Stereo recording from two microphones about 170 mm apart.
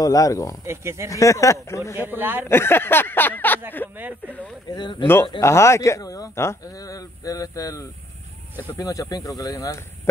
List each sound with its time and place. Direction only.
0.0 s speech: 20° left (ahead or behind)
0.7 s speech: 15° right (ahead or behind)
1.1 s speech: 20° left (ahead or behind)
2.0 s speech: 10° right (ahead or behind)
2.4 s speech: 15° left (ahead or behind)
4.6 s speech: 25° left (ahead or behind)